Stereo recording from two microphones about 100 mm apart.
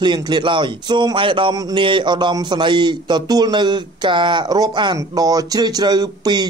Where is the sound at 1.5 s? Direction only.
40° right (ahead or behind).